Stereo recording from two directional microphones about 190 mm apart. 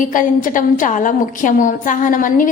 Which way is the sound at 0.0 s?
45° left (ahead or behind).